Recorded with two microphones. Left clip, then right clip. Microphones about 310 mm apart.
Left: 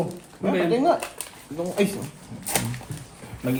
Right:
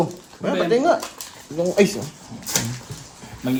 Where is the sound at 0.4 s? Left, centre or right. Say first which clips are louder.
Right 3 dB; right.